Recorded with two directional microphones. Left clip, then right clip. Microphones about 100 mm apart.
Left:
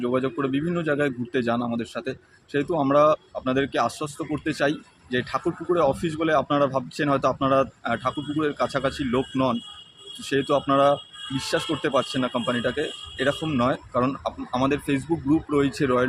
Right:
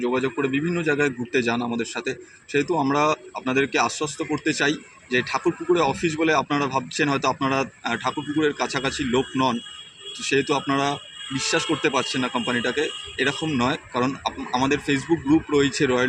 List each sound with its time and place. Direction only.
0.0 s a man's voice: 45° left (ahead or behind)